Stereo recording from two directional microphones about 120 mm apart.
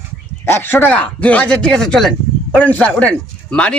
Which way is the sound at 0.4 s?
20° left (ahead or behind).